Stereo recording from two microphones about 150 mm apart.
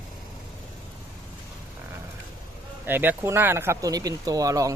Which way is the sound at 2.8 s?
15° right (ahead or behind).